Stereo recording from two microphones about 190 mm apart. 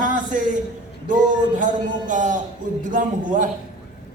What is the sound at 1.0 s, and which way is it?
A man's voice, 45° right (ahead or behind).